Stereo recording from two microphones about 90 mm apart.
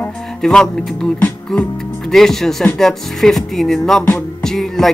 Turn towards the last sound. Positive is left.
turn(degrees=5)  # may be behind; listen again after turning